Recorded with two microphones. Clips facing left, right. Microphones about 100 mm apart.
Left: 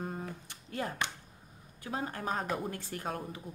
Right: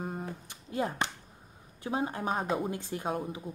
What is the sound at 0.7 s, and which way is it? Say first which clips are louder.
A woman's voice: right 4 dB; 20° right (ahead or behind).